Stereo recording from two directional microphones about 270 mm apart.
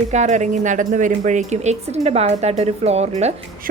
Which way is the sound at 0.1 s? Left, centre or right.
Right.